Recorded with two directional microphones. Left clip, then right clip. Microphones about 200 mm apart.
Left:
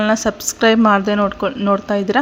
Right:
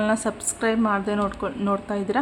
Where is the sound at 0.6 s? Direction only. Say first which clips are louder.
Left 10 dB; 25° left (ahead or behind).